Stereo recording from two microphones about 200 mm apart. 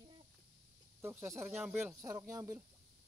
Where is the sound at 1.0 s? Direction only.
10° right (ahead or behind).